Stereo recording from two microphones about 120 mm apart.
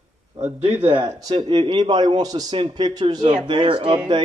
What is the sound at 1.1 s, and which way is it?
Speech, 35° right (ahead or behind).